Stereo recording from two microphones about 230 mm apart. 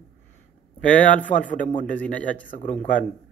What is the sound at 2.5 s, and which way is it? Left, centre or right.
Speech, left.